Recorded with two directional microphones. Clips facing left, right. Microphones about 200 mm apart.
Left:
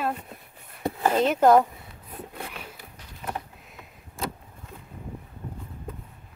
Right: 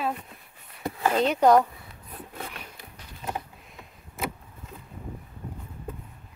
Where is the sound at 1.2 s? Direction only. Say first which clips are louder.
Left 1 dB; centre (ahead or behind).